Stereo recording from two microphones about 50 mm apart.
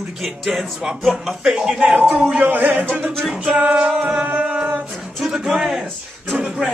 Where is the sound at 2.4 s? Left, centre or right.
Right.